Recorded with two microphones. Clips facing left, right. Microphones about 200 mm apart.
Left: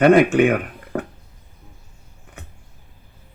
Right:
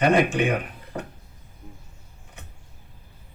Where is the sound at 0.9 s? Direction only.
60° left (ahead or behind).